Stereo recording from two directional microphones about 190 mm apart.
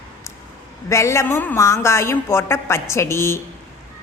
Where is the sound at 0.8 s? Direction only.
15° left (ahead or behind).